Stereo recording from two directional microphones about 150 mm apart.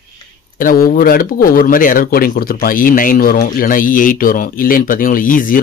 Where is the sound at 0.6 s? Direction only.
70° left (ahead or behind).